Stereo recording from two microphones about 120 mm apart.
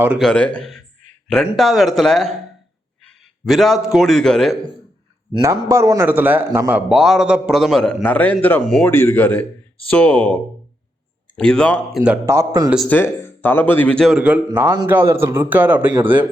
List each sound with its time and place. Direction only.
0.2 s a man's voice: 5° left (ahead or behind)
3.4 s a man's voice: centre (ahead or behind)
5.4 s a man's voice: 25° right (ahead or behind)
6.1 s a man's voice: 15° right (ahead or behind)
6.7 s a man's voice: 10° right (ahead or behind)
12.2 s a man's voice: 25° right (ahead or behind)
12.9 s speech: 15° left (ahead or behind)
14.1 s a man's voice: 10° right (ahead or behind)